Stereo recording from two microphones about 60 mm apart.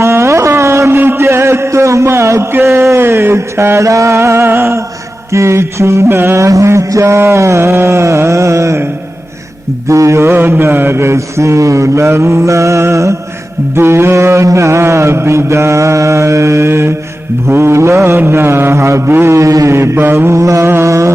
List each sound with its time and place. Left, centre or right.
0.0 s carnatic music: right
0.9 s a sound: right
2.5 s a sound: right
5.3 s mantra: right
6.1 s mantra: right
7.6 s a sound: right
9.9 s mantra: right
10.3 s mantra: right
13.7 s mantra: right
19.0 s a sound: right
19.3 s mantra: right
20.7 s mantra: right